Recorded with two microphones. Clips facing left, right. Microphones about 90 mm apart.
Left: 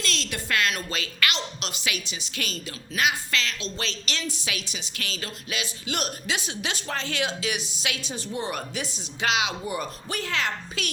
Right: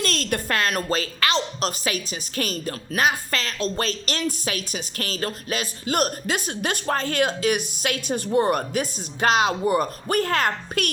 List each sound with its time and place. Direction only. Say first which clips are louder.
0.0 s a woman's voice: right 6 dB; 45° right (ahead or behind)